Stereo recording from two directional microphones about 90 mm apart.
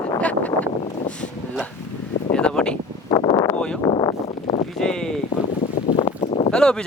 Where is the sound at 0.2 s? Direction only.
15° left (ahead or behind).